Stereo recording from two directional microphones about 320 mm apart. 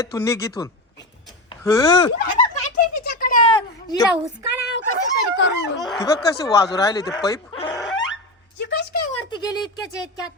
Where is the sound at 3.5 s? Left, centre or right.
Centre.